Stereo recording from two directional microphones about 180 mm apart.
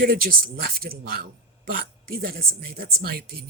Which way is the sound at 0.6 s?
55° right (ahead or behind).